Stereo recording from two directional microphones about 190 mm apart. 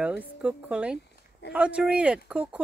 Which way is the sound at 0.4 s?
5° right (ahead or behind).